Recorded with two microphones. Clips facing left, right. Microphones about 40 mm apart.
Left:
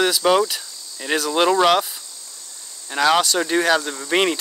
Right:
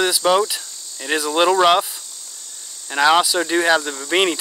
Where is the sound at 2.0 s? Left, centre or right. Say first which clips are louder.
Right 1 dB; right.